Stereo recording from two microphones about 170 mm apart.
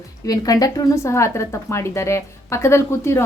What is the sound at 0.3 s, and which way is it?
A woman's voice, 20° left (ahead or behind).